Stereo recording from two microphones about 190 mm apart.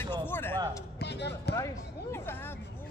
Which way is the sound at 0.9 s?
65° left (ahead or behind).